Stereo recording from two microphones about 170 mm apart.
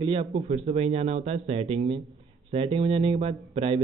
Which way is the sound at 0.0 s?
35° right (ahead or behind).